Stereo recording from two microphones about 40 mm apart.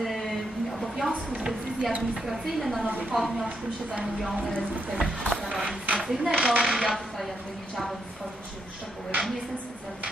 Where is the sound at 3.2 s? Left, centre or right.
Centre.